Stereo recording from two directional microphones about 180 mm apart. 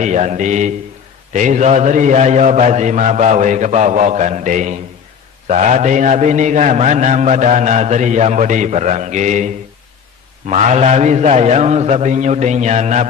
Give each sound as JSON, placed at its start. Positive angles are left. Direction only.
{"t": 0.0, "sound": "a man's voice", "side_deg": -40}
{"t": 10.6, "sound": "a man's voice", "side_deg": -40}